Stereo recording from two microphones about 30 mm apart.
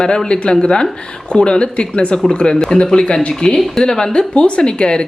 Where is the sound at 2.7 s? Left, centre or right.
Left.